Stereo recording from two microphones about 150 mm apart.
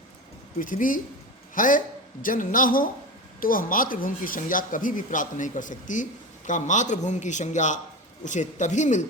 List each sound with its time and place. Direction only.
0.6 s speech: 65° left (ahead or behind)